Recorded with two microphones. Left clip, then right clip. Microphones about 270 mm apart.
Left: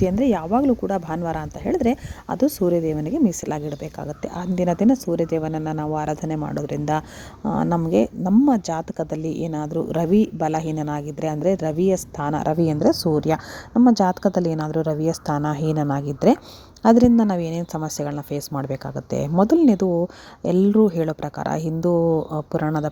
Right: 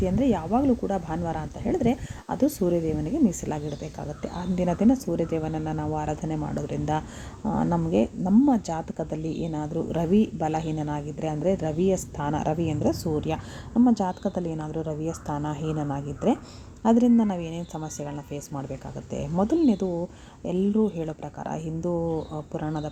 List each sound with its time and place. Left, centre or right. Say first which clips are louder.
0.0 s a woman's voice: left 5 dB; left